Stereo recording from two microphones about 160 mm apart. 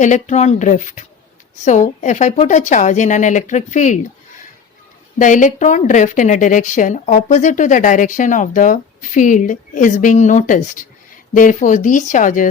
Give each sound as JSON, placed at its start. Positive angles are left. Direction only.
{"t": 0.0, "sound": "a woman's voice", "side_deg": 45}
{"t": 5.1, "sound": "a woman's voice", "side_deg": 50}